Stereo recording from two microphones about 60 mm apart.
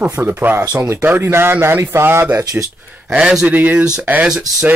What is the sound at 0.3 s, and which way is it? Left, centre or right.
Speech, right.